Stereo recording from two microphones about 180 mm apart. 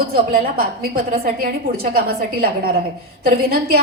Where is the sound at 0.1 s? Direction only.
55° right (ahead or behind).